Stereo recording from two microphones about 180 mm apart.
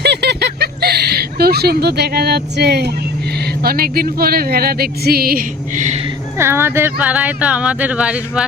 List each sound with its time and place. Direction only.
0.0 s a sound: 65° right (ahead or behind)
3.6 s speech: 55° right (ahead or behind)
6.4 s speech: 15° right (ahead or behind)